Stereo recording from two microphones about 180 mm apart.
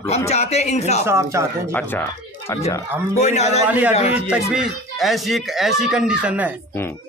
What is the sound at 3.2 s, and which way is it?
Speech, 40° left (ahead or behind).